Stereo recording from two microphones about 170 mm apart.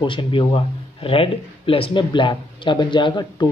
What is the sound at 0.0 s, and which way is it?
Speech, 30° left (ahead or behind).